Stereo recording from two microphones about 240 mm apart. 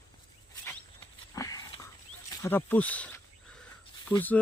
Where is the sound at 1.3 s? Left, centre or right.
Centre.